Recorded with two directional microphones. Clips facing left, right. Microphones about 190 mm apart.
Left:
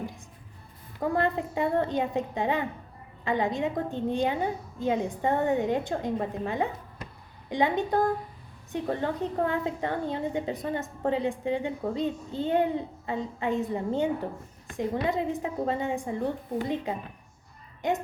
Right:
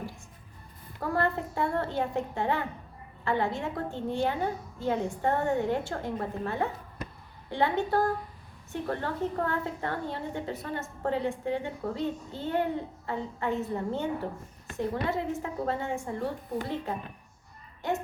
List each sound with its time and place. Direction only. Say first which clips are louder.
1.1 s a woman's voice: left 1 dB; 15° left (ahead or behind)